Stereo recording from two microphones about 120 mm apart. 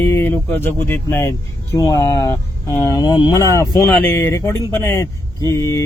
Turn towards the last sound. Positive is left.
turn(degrees=25)  # may be behind; listen again after turning